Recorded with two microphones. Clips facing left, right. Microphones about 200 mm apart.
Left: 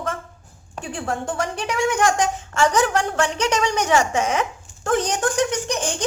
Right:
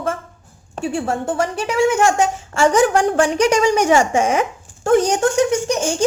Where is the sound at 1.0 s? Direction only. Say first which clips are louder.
Right 4 dB; 25° right (ahead or behind).